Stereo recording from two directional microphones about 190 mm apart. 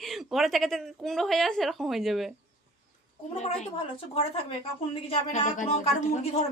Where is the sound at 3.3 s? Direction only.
30° left (ahead or behind).